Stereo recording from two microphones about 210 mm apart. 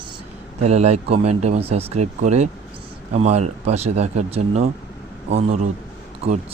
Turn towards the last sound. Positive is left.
turn(degrees=-30)  # may be behind; listen again after turning